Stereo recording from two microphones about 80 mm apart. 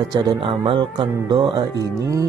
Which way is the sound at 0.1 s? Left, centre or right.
Right.